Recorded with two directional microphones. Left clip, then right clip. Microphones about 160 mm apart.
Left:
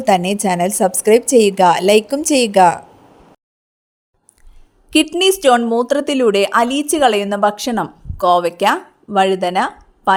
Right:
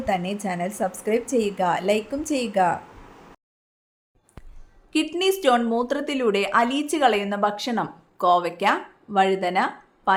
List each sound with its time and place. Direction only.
0.0 s a woman's voice: 65° left (ahead or behind)
4.9 s a woman's voice: 60° left (ahead or behind)